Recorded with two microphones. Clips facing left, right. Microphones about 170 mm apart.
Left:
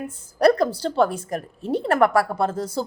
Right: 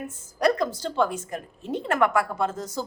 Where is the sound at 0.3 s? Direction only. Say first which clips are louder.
Left 5 dB; 35° left (ahead or behind).